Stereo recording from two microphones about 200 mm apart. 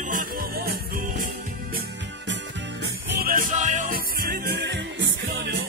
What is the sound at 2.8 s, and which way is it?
Music, 45° right (ahead or behind).